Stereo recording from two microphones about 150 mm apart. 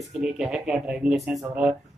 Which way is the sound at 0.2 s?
5° right (ahead or behind).